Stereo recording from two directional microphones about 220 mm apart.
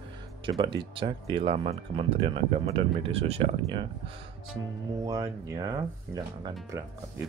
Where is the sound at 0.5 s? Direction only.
20° right (ahead or behind).